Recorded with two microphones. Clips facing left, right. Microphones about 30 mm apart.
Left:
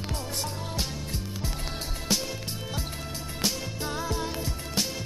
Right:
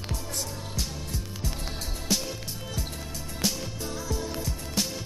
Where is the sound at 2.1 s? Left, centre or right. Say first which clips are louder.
Even; centre.